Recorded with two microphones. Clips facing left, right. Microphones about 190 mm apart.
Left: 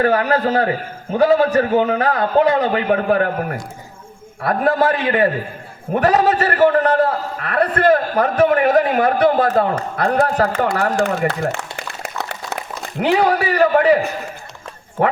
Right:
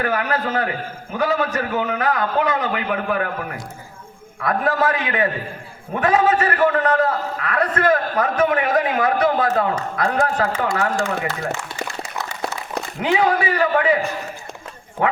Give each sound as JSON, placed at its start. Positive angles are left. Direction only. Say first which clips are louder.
{"t": 0.0, "sound": "a man's voice", "louder": "left 6 dB", "side_deg": 35}
{"t": 10.9, "sound": "speech", "louder": "left 5 dB", "side_deg": 60}
{"t": 11.5, "sound": "a sound", "louder": "even", "side_deg": 60}
{"t": 13.1, "sound": "a man's voice", "louder": "left 3 dB", "side_deg": 35}